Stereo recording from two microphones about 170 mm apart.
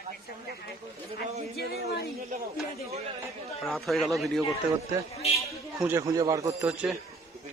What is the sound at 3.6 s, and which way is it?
Speech, centre (ahead or behind).